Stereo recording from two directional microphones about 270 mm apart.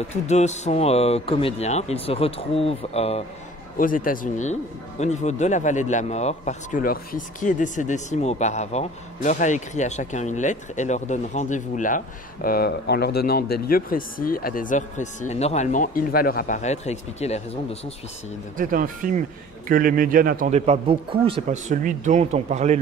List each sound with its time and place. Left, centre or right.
0.3 s speech: left
18.6 s speech: right